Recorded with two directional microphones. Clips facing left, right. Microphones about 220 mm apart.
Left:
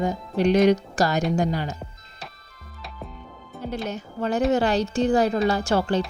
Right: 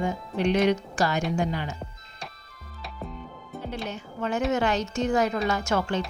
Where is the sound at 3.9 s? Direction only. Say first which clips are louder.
Left 3 dB; 35° left (ahead or behind).